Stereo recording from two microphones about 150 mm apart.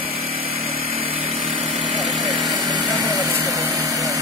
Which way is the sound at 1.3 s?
40° right (ahead or behind).